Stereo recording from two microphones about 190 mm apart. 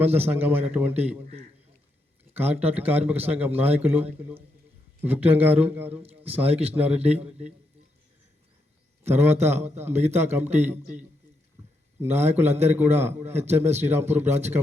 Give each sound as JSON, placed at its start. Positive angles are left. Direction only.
{"t": 0.0, "sound": "a man's voice", "side_deg": -10}
{"t": 2.3, "sound": "a man's voice", "side_deg": -10}
{"t": 6.0, "sound": "a man's voice", "side_deg": -30}
{"t": 6.7, "sound": "a man's voice", "side_deg": -5}
{"t": 9.0, "sound": "a man's voice", "side_deg": -10}
{"t": 12.0, "sound": "a man's voice", "side_deg": -10}